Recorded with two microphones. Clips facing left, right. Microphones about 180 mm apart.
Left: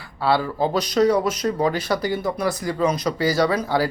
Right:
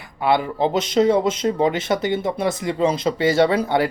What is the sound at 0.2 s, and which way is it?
Speech, 20° right (ahead or behind).